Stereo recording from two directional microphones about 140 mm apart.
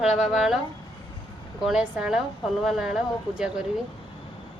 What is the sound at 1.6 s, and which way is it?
Speech, 5° right (ahead or behind).